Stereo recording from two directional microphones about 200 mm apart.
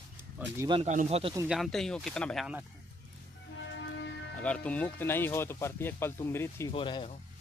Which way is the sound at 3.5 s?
65° left (ahead or behind).